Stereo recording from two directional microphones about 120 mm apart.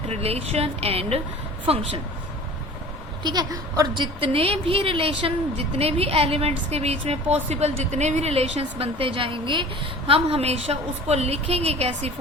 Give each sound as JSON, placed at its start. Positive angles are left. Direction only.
{"t": 0.1, "sound": "a woman's voice", "side_deg": -55}
{"t": 3.2, "sound": "a woman's voice", "side_deg": -35}
{"t": 10.1, "sound": "a woman's voice", "side_deg": -55}